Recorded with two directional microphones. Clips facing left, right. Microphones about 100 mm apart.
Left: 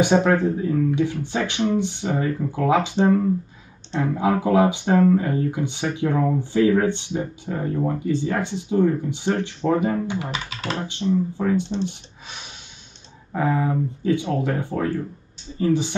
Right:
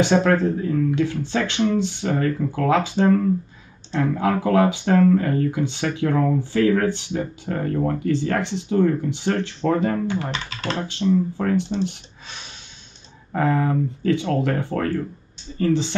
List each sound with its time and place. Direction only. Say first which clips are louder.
0.0 s speech: even; 15° left (ahead or behind)
7.5 s speech: right 1 dB; 10° left (ahead or behind)
12.3 s a sound: even; 15° left (ahead or behind)
13.3 s speech: right 1 dB; 5° left (ahead or behind)